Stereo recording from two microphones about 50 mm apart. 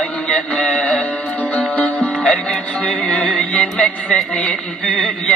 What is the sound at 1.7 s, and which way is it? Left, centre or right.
Music, left.